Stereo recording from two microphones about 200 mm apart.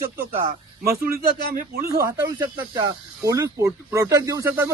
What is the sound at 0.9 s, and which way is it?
Speech, 15° right (ahead or behind).